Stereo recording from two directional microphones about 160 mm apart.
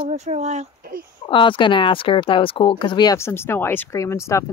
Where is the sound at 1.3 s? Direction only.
30° left (ahead or behind).